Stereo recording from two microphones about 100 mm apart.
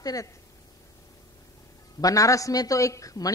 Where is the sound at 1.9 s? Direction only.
35° left (ahead or behind).